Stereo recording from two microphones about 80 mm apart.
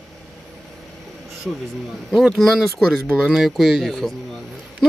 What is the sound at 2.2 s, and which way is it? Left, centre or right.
Speech, centre.